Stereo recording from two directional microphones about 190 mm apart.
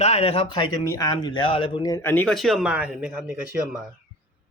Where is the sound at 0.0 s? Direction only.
35° left (ahead or behind); by 3.8 s 5° right (ahead or behind).